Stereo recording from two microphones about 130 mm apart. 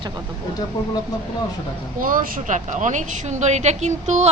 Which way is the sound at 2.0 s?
90° right.